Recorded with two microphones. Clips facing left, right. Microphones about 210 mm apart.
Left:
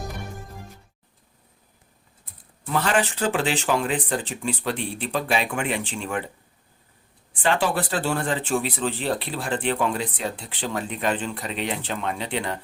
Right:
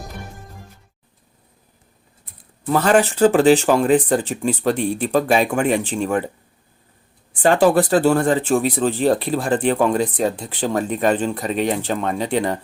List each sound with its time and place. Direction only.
2.6 s speech: 45° right (ahead or behind)
7.4 s speech: 45° right (ahead or behind)